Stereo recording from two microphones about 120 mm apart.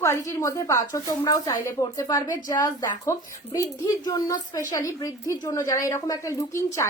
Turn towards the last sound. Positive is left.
turn(degrees=25)  # may be behind; listen again after turning